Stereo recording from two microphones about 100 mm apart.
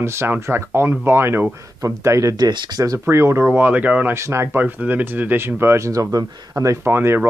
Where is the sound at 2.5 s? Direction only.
45° right (ahead or behind).